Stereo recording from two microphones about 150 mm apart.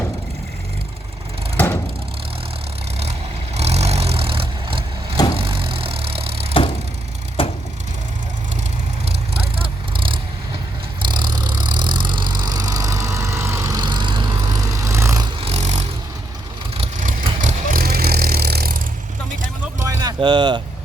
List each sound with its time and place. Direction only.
1.5 s a sound: 15° left (ahead or behind)
3.0 s vehicle: 45° right (ahead or behind)
7.4 s vehicle: 40° left (ahead or behind)
9.0 s vehicle: 40° right (ahead or behind); by 15.3 s 20° right (ahead or behind)
15.4 s vehicle: 45° right (ahead or behind)
17.0 s vehicle: 60° right (ahead or behind); by 18.8 s 90° right
19.8 s a sound: 20° right (ahead or behind)
20.1 s vehicle: 30° right (ahead or behind)